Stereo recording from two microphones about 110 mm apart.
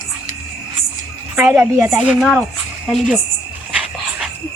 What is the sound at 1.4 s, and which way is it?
Speech, 20° right (ahead or behind).